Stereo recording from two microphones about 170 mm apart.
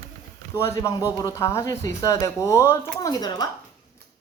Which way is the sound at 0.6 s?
15° left (ahead or behind).